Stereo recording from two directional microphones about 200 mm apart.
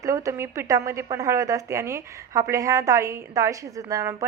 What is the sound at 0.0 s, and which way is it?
A woman's voice, 15° right (ahead or behind).